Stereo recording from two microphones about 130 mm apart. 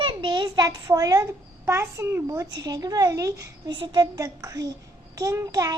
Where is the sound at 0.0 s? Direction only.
35° right (ahead or behind).